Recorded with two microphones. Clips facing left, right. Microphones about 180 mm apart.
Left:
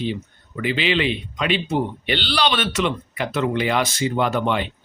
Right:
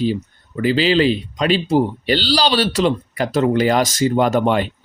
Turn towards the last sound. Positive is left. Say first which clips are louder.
# right 5 dB
turn(degrees=-45)  # may be behind; listen again after turning